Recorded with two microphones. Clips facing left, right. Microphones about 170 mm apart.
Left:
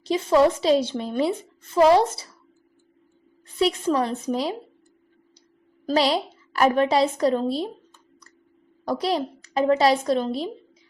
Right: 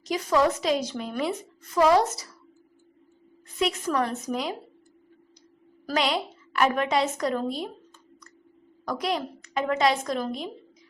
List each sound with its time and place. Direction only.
0.0 s a woman's voice: 25° left (ahead or behind)
3.6 s a woman's voice: 30° left (ahead or behind)
5.8 s a woman's voice: 30° left (ahead or behind)
8.8 s a woman's voice: 30° left (ahead or behind)